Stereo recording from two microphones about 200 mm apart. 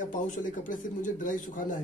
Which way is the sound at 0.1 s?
40° left (ahead or behind).